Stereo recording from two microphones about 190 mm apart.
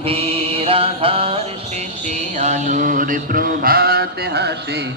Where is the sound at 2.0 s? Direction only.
40° right (ahead or behind); by 4.9 s 60° right (ahead or behind).